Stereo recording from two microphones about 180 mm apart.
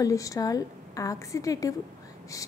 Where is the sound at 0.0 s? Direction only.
20° left (ahead or behind).